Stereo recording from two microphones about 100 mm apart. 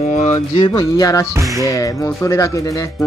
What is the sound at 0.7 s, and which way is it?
Speech, 40° left (ahead or behind).